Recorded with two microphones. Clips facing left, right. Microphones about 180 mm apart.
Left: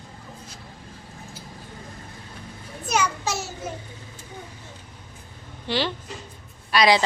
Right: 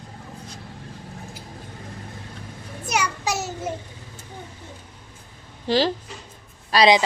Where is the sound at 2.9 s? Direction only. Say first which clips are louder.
Even; 15° right (ahead or behind).